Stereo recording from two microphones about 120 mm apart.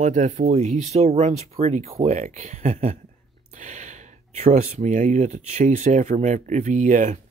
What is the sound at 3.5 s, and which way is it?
Speech, 90° right.